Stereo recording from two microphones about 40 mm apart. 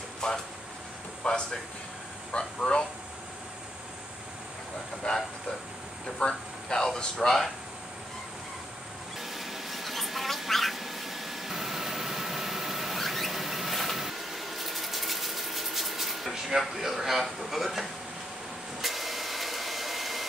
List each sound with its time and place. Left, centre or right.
0.2 s speech: centre
5.1 s speech: left
9.2 s a sound: centre
17.2 s speech: centre
18.8 s vacuum cleaner: centre